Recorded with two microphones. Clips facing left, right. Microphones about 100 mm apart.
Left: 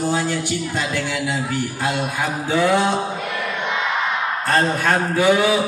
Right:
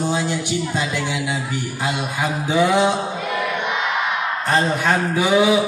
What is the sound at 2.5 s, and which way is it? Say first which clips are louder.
Speech: right 1 dB; 15° right (ahead or behind).